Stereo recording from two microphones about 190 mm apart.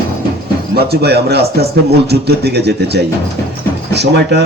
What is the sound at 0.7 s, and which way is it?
A man's voice, 60° right (ahead or behind).